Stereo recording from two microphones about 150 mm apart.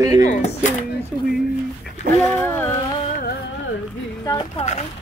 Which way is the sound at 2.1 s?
85° right.